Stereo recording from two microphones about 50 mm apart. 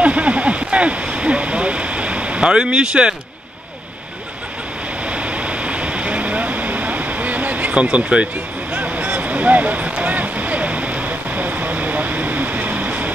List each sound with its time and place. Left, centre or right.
0.0 s a sound: right
5.0 s vehicle: right
7.8 s speech: right
8.7 s vehicle: right